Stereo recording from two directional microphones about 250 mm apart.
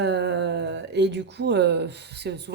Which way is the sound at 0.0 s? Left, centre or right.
Right.